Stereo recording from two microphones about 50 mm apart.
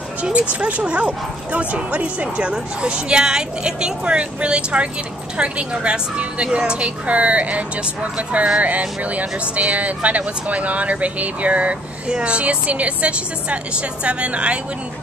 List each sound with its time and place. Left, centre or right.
0.2 s speech: right